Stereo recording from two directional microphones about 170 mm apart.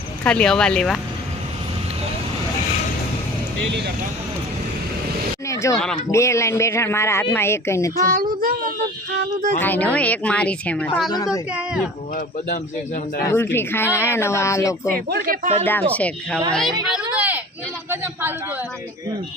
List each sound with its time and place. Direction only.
0.3 s speech: 5° left (ahead or behind)
5.5 s speech: 20° left (ahead or behind)
8.1 s a child's voice: 60° right (ahead or behind)
9.6 s speech: 10° left (ahead or behind)
11.3 s speech: 5° right (ahead or behind)
13.2 s speech: 15° left (ahead or behind)
14.9 s a child's voice: 65° right (ahead or behind)
15.9 s speech: 10° left (ahead or behind)
16.9 s a sound: 10° right (ahead or behind)
17.9 s a man's voice: 15° right (ahead or behind)